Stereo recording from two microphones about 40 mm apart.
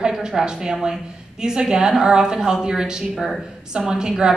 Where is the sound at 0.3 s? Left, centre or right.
Centre.